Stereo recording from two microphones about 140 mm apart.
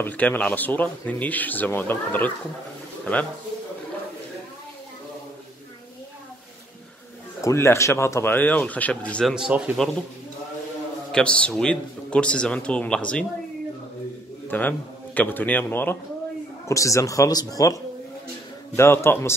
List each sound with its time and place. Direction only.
0.0 s speech: 10° left (ahead or behind)
7.4 s speech: 20° left (ahead or behind)
9.3 s speech: 5° right (ahead or behind)
11.1 s speech: 5° left (ahead or behind)
14.5 s speech: 15° left (ahead or behind)
18.8 s speech: 20° left (ahead or behind)